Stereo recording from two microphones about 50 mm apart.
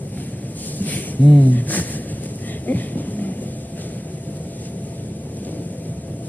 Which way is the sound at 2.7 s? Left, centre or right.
Left.